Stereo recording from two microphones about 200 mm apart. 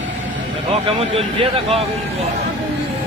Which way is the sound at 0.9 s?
25° right (ahead or behind).